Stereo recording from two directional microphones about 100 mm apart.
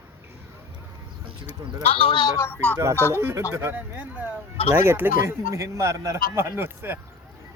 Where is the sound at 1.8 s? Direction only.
70° left (ahead or behind); by 2.3 s 55° left (ahead or behind).